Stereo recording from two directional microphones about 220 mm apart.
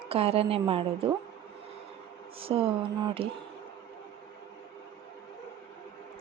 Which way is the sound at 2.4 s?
25° right (ahead or behind).